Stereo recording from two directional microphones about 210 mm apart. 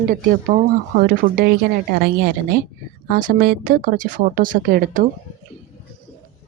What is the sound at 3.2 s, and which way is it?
Speech, 45° right (ahead or behind).